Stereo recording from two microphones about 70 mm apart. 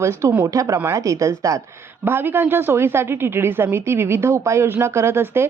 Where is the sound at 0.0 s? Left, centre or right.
Right.